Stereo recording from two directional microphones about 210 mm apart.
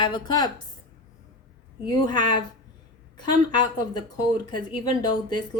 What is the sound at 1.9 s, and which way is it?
Speech, 20° left (ahead or behind).